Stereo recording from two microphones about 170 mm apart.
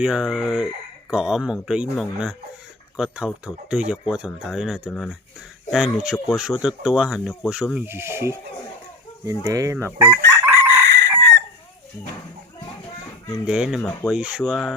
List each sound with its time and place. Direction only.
0.0 s speech: 5° right (ahead or behind)
9.7 s chicken: 10° right (ahead or behind)
10.5 s chicken: 15° left (ahead or behind)
10.8 s chicken: 90° right
13.4 s speech: 5° right (ahead or behind)